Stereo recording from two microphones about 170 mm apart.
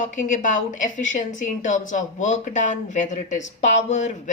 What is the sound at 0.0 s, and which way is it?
A woman's voice, 50° left (ahead or behind).